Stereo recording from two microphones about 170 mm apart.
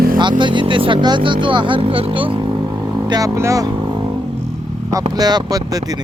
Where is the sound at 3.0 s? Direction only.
20° right (ahead or behind).